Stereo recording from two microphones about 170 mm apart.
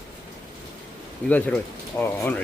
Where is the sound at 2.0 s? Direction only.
15° left (ahead or behind).